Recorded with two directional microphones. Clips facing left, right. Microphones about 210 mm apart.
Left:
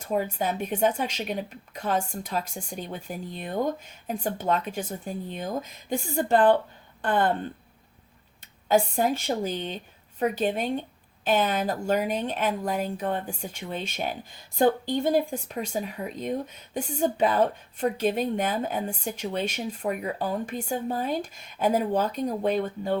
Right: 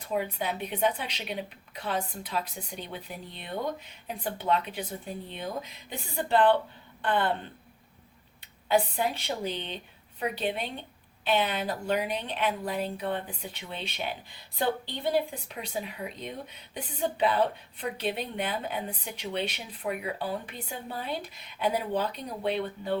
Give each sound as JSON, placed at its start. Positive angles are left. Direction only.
{"t": 0.0, "sound": "a woman's voice", "side_deg": 45}
{"t": 8.6, "sound": "a woman's voice", "side_deg": 45}